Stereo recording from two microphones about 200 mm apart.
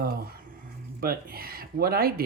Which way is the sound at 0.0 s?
50° right (ahead or behind).